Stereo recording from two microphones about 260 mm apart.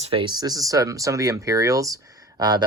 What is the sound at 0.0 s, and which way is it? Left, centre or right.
Speech, right.